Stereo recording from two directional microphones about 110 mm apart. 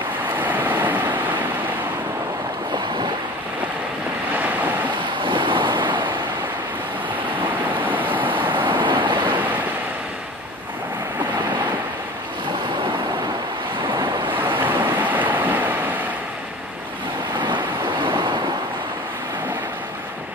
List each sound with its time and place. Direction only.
0.4 s vehicle: 15° right (ahead or behind)
4.3 s waves: 15° right (ahead or behind)
5.2 s vehicle: 50° right (ahead or behind)
7.7 s vehicle: 15° right (ahead or behind)
8.5 s waves: 45° right (ahead or behind)
14.6 s waves: 15° right (ahead or behind)